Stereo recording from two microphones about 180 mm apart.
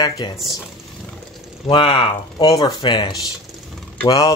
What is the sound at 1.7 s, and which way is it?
Speech, 30° left (ahead or behind).